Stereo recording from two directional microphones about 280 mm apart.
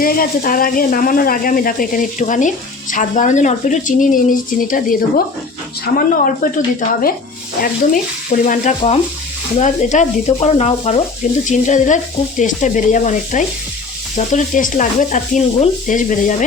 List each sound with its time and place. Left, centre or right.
0.0 s speech: left
2.9 s stir: left
4.7 s speech: left
5.8 s stir: left
8.4 s stir: left